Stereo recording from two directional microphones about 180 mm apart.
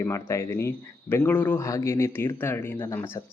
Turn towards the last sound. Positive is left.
turn(degrees=15)  # may be behind; listen again after turning